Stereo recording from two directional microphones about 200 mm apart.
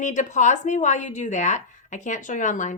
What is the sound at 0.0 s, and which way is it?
Speech, 40° left (ahead or behind).